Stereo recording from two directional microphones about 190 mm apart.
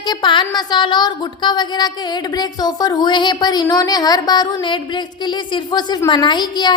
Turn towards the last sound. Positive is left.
turn(degrees=20)  # may be behind; listen again after turning